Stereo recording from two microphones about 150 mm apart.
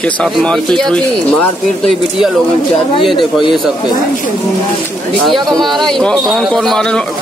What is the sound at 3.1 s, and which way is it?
Speech, 30° left (ahead or behind).